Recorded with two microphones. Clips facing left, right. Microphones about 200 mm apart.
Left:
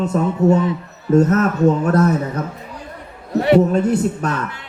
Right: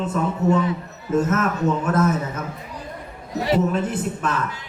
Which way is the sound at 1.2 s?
35° left (ahead or behind).